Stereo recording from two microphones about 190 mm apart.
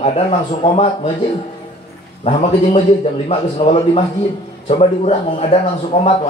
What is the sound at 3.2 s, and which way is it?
A man's voice, 30° left (ahead or behind).